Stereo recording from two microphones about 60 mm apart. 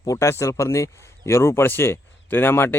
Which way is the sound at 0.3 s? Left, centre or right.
Left.